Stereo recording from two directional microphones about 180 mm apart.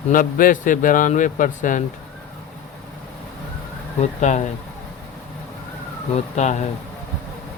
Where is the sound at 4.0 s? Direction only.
40° left (ahead or behind).